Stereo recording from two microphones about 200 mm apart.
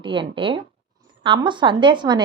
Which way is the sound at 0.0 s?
25° right (ahead or behind).